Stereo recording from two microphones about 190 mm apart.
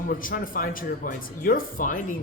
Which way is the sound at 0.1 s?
45° left (ahead or behind).